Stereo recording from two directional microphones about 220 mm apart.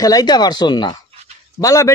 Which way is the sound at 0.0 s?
15° left (ahead or behind).